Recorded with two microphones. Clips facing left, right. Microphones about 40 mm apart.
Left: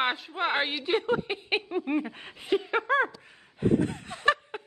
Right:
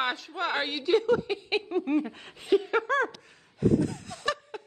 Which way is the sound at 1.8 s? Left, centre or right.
Left.